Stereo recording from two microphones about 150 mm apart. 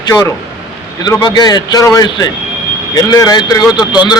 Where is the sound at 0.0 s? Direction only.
25° left (ahead or behind).